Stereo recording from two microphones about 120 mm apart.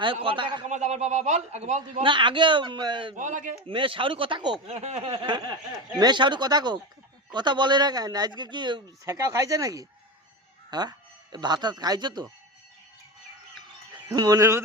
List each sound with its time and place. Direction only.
0.0 s a man's voice: 45° right (ahead or behind)
0.7 s a man's voice: 75° right (ahead or behind)
2.0 s a man's voice: 45° right (ahead or behind)
3.2 s a man's voice: 90° right
3.7 s a man's voice: 45° right (ahead or behind)
4.6 s a man's voice: 65° right (ahead or behind); by 8.8 s 40° right (ahead or behind)
9.0 s speech: 30° right (ahead or behind)
13.9 s speech: 35° right (ahead or behind)